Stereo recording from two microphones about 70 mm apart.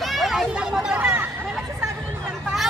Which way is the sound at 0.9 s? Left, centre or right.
Right.